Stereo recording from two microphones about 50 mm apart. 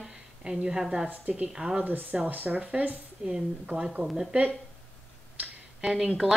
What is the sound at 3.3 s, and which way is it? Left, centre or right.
Speech, centre.